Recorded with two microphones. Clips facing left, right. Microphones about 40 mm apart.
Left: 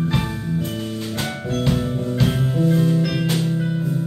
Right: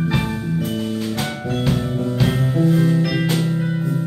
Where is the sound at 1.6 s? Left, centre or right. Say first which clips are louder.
Even; centre.